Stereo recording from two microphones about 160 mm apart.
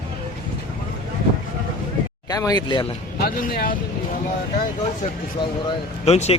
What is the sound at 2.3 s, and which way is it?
Speech, 20° left (ahead or behind).